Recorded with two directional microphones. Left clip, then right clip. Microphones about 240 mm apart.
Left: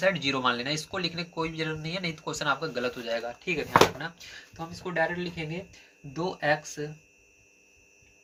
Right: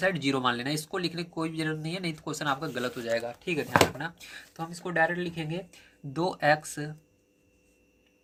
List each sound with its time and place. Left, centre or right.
0.0 s speech: right